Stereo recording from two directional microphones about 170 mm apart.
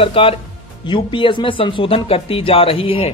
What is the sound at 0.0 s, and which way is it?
Speech, 35° left (ahead or behind).